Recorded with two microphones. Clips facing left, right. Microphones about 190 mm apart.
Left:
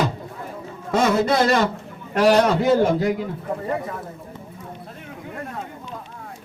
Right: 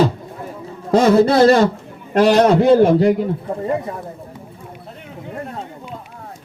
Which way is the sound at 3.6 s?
20° right (ahead or behind).